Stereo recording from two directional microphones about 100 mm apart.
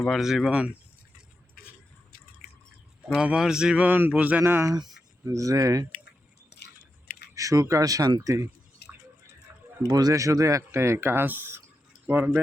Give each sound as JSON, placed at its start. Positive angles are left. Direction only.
{"t": 0.1, "sound": "speech", "side_deg": -5}
{"t": 3.2, "sound": "speech", "side_deg": -10}
{"t": 7.3, "sound": "speech", "side_deg": -35}
{"t": 9.5, "sound": "a sound", "side_deg": -25}
{"t": 9.8, "sound": "speech", "side_deg": -40}